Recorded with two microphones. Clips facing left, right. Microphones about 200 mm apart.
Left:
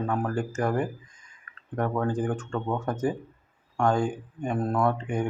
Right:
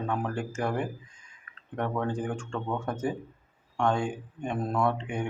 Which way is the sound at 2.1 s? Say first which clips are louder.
Left 4 dB; 10° right (ahead or behind).